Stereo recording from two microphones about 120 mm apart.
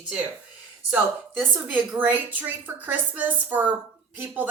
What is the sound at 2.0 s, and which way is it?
Speech, 15° right (ahead or behind).